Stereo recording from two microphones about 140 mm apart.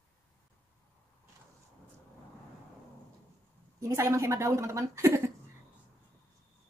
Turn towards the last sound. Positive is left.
turn(degrees=-20)  # may be behind; listen again after turning